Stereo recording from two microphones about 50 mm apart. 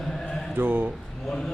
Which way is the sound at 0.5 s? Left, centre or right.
Right.